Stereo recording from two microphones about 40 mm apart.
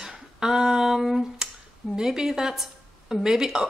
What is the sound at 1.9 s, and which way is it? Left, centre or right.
Speech, centre.